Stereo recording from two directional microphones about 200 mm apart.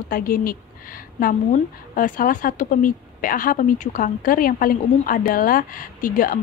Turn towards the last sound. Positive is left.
turn(degrees=45)  # may be behind; listen again after turning